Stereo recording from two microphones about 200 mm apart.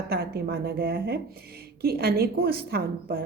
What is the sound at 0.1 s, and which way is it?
A woman's voice, 50° right (ahead or behind).